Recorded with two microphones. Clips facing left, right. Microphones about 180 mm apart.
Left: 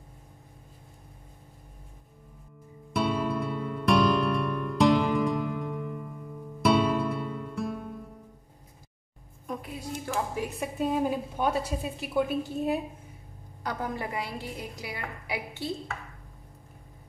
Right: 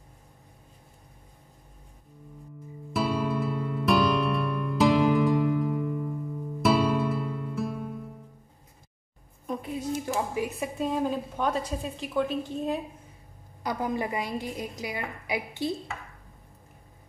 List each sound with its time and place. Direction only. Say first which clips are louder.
2.9 s music: even; centre (ahead or behind)
9.5 s a woman's voice: right 5 dB; 20° right (ahead or behind)
10.1 s a woman's voice: left 1 dB; 10° right (ahead or behind)
10.6 s a woman's voice: left 3 dB; 5° left (ahead or behind)
13.6 s a woman's voice: right 4 dB; 15° right (ahead or behind)